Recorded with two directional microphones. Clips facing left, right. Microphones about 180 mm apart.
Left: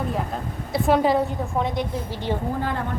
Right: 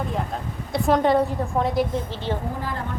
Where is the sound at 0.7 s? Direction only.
Centre (ahead or behind).